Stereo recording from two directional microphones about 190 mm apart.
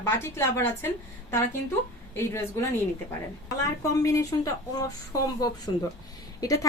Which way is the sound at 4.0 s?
15° left (ahead or behind).